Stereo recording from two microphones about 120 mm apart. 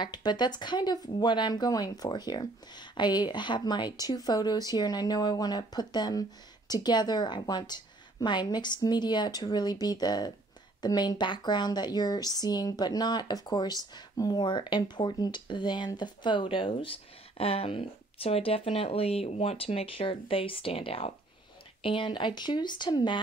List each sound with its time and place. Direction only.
0.0 s speech: 35° left (ahead or behind); by 21.1 s 55° left (ahead or behind)
21.8 s speech: 45° left (ahead or behind)